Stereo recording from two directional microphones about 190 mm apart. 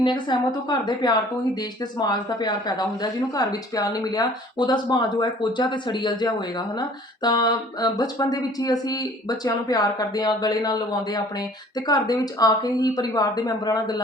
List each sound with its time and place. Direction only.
0.0 s speech: 25° left (ahead or behind)